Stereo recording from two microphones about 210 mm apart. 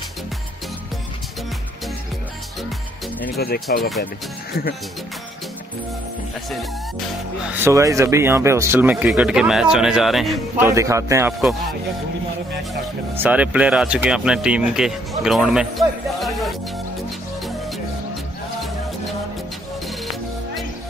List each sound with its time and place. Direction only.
3.3 s speech: 45° left (ahead or behind)
7.5 s speech: 15° right (ahead or behind)
10.7 s speech: 15° right (ahead or behind)
13.1 s speech: 10° right (ahead or behind)
16.2 s music: centre (ahead or behind)